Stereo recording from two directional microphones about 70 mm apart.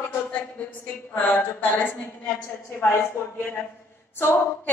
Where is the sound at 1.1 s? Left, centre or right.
Left.